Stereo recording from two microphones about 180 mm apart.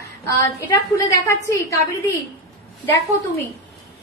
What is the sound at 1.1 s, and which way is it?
Speech, 15° left (ahead or behind).